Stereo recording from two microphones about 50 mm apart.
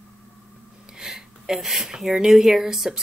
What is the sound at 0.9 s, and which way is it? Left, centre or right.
Speech, centre.